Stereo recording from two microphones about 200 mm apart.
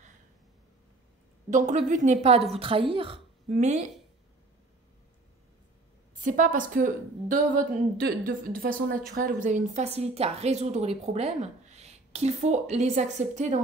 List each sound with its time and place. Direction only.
1.5 s a woman's voice: 40° right (ahead or behind)
6.2 s a woman's voice: 40° right (ahead or behind)